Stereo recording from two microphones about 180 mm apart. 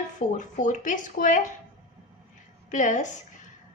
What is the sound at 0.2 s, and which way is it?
A woman's voice, 45° left (ahead or behind).